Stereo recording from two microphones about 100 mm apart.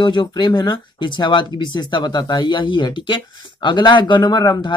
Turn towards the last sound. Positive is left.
turn(degrees=45)  # may be behind; listen again after turning